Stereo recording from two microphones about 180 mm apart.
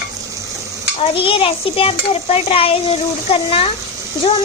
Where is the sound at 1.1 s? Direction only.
30° left (ahead or behind).